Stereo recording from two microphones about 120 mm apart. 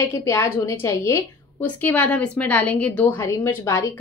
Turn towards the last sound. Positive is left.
turn(degrees=25)  # may be behind; listen again after turning